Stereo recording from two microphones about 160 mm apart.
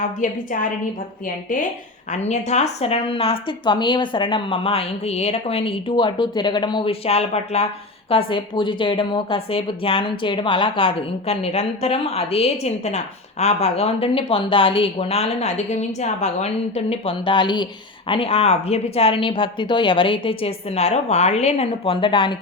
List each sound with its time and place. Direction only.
0.2 s a woman's voice: 55° left (ahead or behind)
2.0 s speech: 45° left (ahead or behind)